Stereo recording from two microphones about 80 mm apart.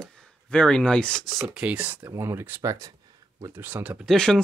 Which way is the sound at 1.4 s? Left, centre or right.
Centre.